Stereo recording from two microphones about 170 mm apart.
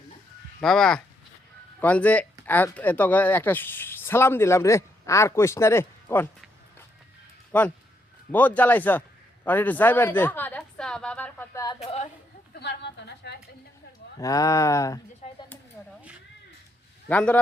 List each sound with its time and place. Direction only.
0.6 s speech: centre (ahead or behind)
7.5 s a man's voice: 10° left (ahead or behind)
11.8 s a woman's voice: 40° left (ahead or behind)
12.5 s a woman's voice: 80° left
14.2 s speech: 20° left (ahead or behind)
15.2 s a sound: 40° left (ahead or behind)
17.1 s speech: 10° left (ahead or behind)